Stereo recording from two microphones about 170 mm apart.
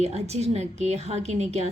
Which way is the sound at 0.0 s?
40° right (ahead or behind).